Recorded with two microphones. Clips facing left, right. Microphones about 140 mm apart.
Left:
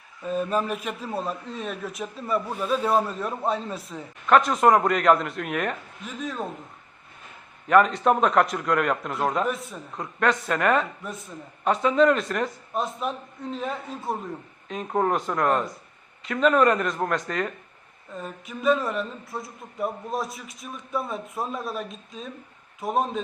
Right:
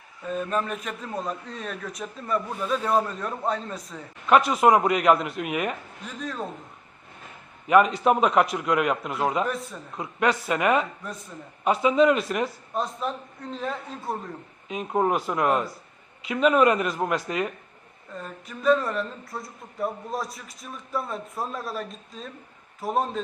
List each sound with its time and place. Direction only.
0.3 s a man's voice: 15° left (ahead or behind)
7.7 s speech: 5° right (ahead or behind)